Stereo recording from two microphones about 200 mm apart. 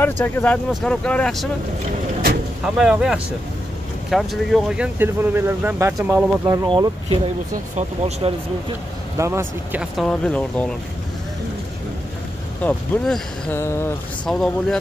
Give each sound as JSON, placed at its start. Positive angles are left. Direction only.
{"t": 0.0, "sound": "speech", "side_deg": 10}
{"t": 2.6, "sound": "speech", "side_deg": -5}
{"t": 9.2, "sound": "speech", "side_deg": -10}
{"t": 12.6, "sound": "speech", "side_deg": 5}